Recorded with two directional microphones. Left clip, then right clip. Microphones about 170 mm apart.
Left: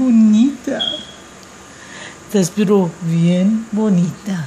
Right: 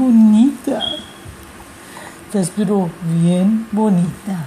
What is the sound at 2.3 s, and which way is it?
Speech, 25° left (ahead or behind).